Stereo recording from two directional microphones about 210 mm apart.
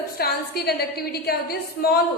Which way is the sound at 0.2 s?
50° left (ahead or behind).